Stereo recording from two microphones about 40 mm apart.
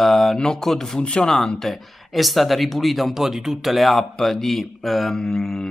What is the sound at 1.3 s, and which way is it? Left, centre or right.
Speech, centre.